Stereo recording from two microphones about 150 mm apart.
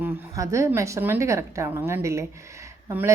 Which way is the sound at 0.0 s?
20° right (ahead or behind).